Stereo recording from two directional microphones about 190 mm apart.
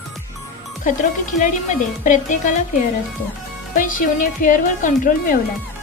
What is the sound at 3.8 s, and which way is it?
Speech, 45° left (ahead or behind).